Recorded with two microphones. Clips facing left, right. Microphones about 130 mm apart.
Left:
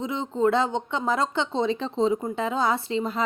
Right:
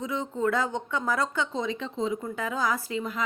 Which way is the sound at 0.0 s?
25° left (ahead or behind).